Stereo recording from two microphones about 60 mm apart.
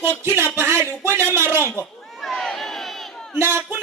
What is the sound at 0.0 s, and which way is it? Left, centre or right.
Speech, right.